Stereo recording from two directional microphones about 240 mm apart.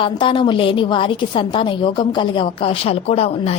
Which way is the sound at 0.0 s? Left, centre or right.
Left.